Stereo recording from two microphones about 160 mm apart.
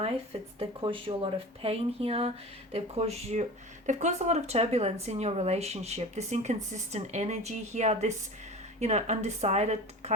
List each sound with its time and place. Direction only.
0.6 s a woman's voice: 35° right (ahead or behind)